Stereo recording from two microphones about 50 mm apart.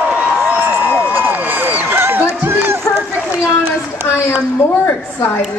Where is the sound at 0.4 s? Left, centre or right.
Right.